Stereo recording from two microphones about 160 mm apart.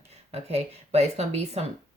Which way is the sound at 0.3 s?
40° right (ahead or behind).